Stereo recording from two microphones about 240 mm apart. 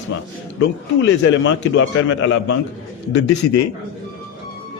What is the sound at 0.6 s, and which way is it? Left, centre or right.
Speech, left.